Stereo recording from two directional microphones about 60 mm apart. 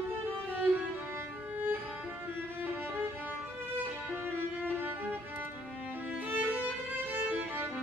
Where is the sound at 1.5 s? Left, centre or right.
Right.